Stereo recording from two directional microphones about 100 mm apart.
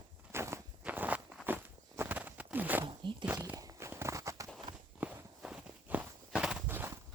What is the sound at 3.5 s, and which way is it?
Walk, 30° right (ahead or behind).